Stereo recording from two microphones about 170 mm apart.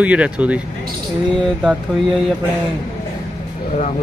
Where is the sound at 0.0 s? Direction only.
10° right (ahead or behind).